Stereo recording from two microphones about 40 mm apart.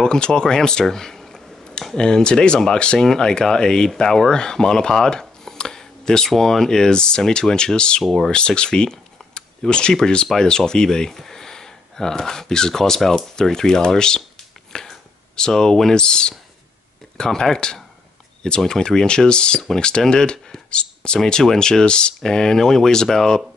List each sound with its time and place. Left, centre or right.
0.0 s speech: centre
14.7 s a sound: centre
17.2 s speech: centre